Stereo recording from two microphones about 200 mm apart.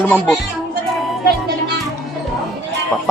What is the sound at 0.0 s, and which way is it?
Speech, 5° left (ahead or behind).